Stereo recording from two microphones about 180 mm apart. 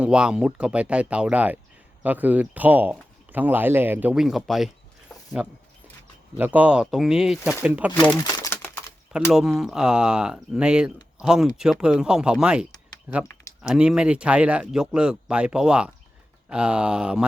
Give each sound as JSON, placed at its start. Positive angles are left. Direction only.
{"t": 0.0, "sound": "speech", "side_deg": -5}
{"t": 8.1, "sound": "crumpling", "side_deg": 20}
{"t": 9.3, "sound": "speech", "side_deg": 0}